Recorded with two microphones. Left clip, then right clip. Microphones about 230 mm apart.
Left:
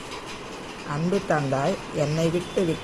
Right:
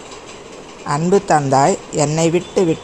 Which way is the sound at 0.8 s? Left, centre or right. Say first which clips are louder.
Right 11 dB; right.